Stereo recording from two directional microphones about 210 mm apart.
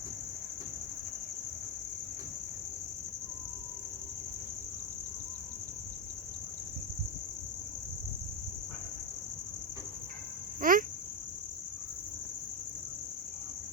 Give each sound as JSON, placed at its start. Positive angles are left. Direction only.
{"t": 10.6, "sound": "cricket", "side_deg": -40}